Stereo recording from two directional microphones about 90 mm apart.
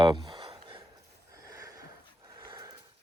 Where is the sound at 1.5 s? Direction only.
40° right (ahead or behind).